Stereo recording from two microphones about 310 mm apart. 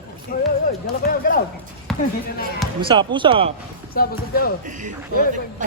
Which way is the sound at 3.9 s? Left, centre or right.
Left.